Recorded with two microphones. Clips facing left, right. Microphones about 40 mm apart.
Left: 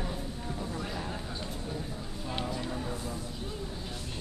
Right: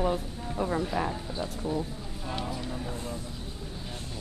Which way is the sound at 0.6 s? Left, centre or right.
Right.